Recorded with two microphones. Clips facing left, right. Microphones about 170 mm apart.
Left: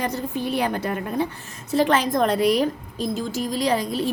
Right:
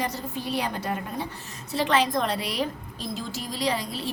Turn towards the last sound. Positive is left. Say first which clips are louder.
# left 6 dB
turn(degrees=45)  # may be behind; listen again after turning